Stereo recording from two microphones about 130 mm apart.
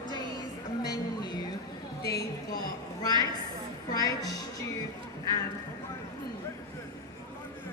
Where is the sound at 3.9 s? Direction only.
30° left (ahead or behind).